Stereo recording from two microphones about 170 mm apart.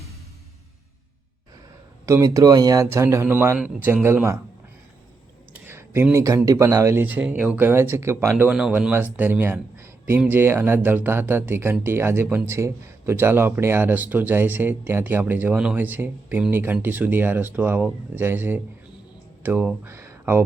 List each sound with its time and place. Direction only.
2.0 s speech: 20° right (ahead or behind)
5.5 s speech: 15° right (ahead or behind)